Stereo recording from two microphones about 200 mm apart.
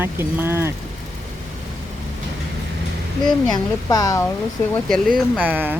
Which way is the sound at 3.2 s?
20° left (ahead or behind).